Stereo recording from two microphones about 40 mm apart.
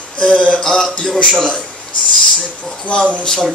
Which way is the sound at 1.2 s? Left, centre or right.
Centre.